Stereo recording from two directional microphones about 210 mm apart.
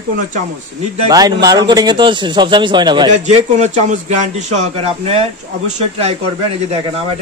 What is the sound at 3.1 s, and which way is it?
A man's voice, 35° right (ahead or behind).